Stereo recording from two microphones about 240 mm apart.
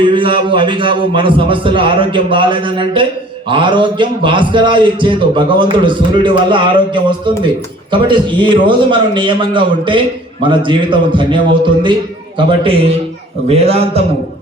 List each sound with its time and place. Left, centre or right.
0.0 s a man's voice: right
12.4 s a man's voice: right